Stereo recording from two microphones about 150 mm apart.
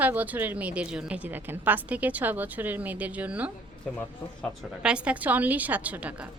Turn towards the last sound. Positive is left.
turn(degrees=-10)  # may be behind; listen again after turning